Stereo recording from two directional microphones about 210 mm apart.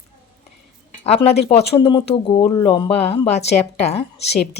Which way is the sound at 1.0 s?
30° left (ahead or behind).